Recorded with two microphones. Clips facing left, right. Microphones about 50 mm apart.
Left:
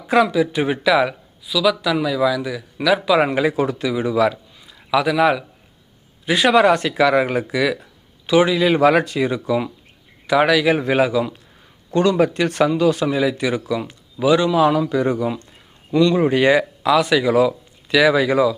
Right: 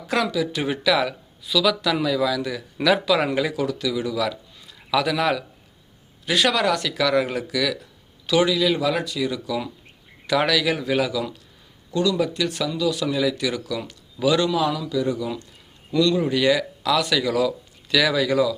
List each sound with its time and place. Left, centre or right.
0.1 s speech: left
1.5 s a man's voice: centre
3.1 s speech: left
4.6 s a man's voice: centre
8.7 s speech: left
11.9 s speech: left
14.6 s speech: left
15.9 s speech: left